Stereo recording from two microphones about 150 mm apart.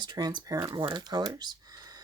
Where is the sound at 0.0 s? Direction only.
30° right (ahead or behind).